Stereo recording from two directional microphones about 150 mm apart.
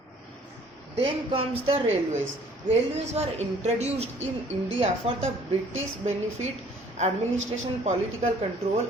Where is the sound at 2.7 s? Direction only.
45° right (ahead or behind).